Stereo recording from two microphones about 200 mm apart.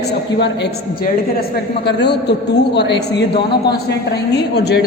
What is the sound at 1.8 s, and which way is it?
A woman's voice, 60° left (ahead or behind).